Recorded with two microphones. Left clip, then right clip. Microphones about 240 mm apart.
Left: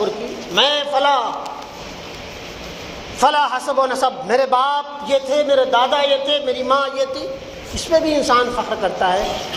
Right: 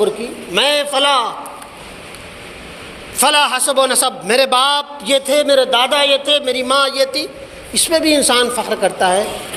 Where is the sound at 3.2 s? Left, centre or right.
Right.